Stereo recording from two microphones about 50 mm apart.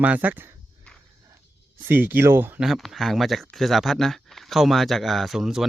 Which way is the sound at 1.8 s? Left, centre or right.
Right.